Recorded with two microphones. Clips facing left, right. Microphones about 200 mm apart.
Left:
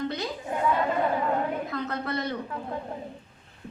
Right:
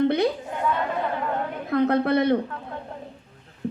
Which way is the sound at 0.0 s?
60° right (ahead or behind).